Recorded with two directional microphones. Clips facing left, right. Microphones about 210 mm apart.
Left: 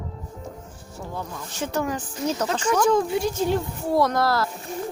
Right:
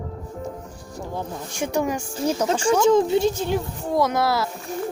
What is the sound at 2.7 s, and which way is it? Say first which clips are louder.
Speech: right 3 dB; 25° right (ahead or behind).